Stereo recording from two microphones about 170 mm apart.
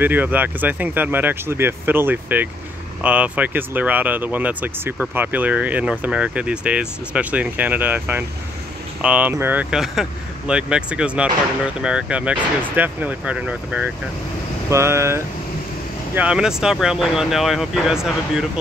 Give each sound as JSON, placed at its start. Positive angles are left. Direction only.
{"t": 0.0, "sound": "speech", "side_deg": -10}
{"t": 16.2, "sound": "speech", "side_deg": -5}